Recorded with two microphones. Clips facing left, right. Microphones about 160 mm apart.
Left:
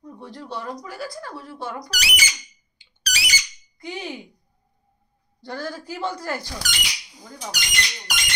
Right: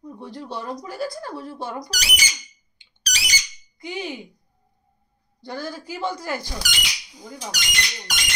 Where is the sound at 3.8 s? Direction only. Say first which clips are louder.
Right 2 dB; 5° right (ahead or behind).